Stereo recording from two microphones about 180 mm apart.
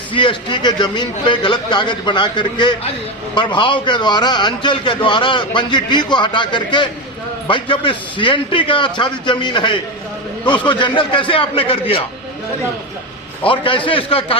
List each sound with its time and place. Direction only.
0.1 s a man's voice: 25° left (ahead or behind)
13.4 s a man's voice: 30° left (ahead or behind)